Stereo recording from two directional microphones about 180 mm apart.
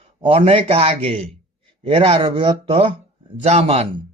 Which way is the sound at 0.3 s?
30° right (ahead or behind).